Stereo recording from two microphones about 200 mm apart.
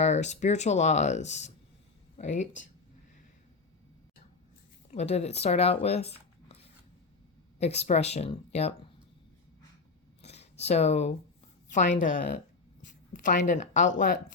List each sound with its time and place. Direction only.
0.0 s speech: 35° left (ahead or behind)
4.9 s speech: 35° left (ahead or behind)
7.6 s speech: 35° left (ahead or behind)
10.2 s a sound: 35° left (ahead or behind)
11.9 s a woman's voice: 45° left (ahead or behind)